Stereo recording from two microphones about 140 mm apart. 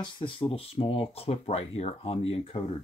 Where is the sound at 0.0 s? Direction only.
35° left (ahead or behind).